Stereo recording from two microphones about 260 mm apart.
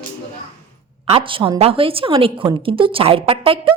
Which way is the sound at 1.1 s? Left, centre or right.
Centre.